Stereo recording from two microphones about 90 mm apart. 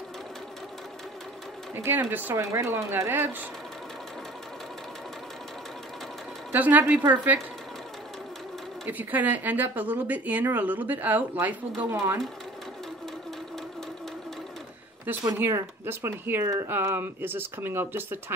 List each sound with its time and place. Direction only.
1.8 s speech: 25° right (ahead or behind)
6.5 s speech: 20° right (ahead or behind)
8.8 s speech: 20° right (ahead or behind)
15.3 s speech: 25° right (ahead or behind)